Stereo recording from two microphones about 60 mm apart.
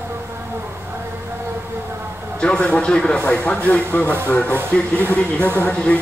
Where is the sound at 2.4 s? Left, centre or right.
Centre.